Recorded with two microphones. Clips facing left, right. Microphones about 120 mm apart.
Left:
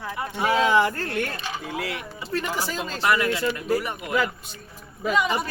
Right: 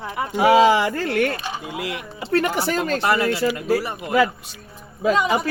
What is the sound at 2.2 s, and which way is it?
Speech, 75° right (ahead or behind).